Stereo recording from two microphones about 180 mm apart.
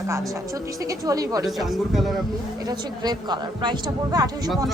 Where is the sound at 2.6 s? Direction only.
20° right (ahead or behind).